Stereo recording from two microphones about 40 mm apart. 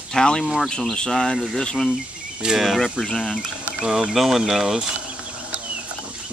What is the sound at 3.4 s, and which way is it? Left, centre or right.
Speech, centre.